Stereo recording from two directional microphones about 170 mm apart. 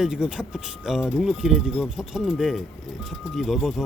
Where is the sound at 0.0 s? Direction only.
5° right (ahead or behind).